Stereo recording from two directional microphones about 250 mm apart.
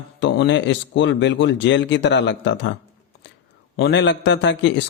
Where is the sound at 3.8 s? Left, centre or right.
Left.